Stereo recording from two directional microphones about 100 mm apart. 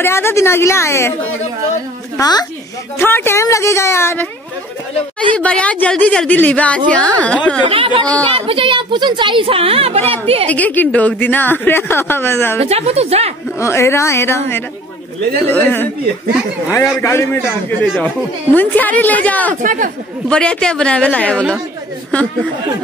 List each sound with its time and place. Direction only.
0.0 s speech: 25° left (ahead or behind)
2.1 s a woman's voice: 40° left (ahead or behind)
3.0 s speech: 25° left (ahead or behind)
5.3 s speech: 15° left (ahead or behind)
7.6 s a woman's voice: 65° right (ahead or behind); by 10.5 s 80° right
10.5 s speech: 15° left (ahead or behind)
12.5 s a woman's voice: 90° right
13.6 s speech: 25° left (ahead or behind)
16.7 s speech: 30° left (ahead or behind)
17.9 s speech: 15° left (ahead or behind)